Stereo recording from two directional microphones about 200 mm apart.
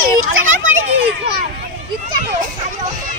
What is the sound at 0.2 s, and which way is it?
Children playing, 80° right.